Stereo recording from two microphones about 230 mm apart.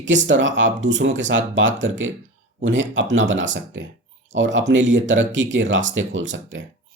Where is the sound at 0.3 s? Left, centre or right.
Right.